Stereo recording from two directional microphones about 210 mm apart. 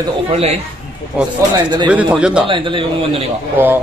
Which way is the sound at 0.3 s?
30° right (ahead or behind).